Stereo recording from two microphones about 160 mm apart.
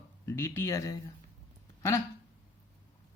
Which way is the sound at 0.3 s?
15° left (ahead or behind).